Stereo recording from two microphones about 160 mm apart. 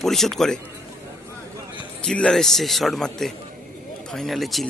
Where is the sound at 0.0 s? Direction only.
Centre (ahead or behind).